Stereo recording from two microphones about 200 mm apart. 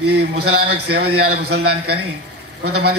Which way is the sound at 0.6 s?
55° right (ahead or behind).